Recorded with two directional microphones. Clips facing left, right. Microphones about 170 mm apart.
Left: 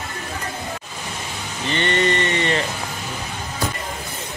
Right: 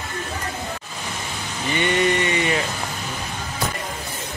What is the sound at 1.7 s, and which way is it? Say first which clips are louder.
Rain: even; 10° right (ahead or behind).